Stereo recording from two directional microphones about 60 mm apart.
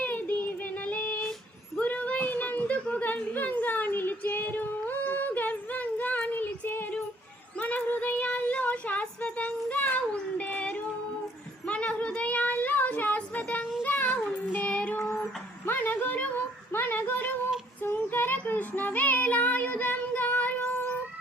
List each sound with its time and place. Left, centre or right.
0.0 s child singing: left
0.9 s female singing: left
1.8 s a sound: left
13.8 s child singing: left
15.6 s a sound: left
17.8 s child singing: left